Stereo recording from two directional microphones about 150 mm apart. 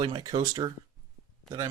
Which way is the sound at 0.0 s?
30° right (ahead or behind).